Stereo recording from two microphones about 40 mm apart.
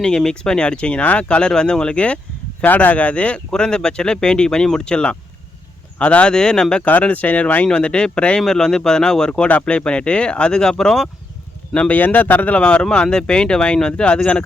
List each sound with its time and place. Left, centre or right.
0.3 s speech: centre
2.6 s speech: left
3.5 s speech: centre
6.3 s speech: centre
7.0 s speech: left
8.4 s speech: centre
11.7 s speech: left
12.5 s speech: left